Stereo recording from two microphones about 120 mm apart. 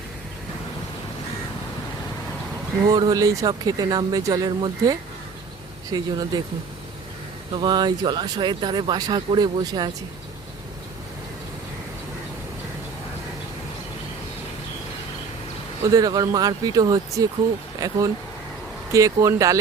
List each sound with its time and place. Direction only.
2.9 s speech: 35° right (ahead or behind)
7.5 s speech: 40° right (ahead or behind)
15.8 s speech: 30° right (ahead or behind)